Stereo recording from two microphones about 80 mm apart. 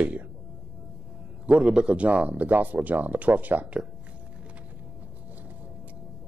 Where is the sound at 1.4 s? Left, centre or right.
Centre.